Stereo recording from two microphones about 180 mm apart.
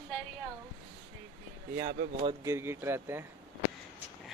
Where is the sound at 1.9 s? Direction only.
35° right (ahead or behind).